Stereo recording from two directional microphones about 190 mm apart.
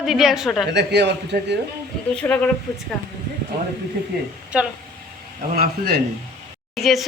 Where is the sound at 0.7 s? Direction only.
60° right (ahead or behind).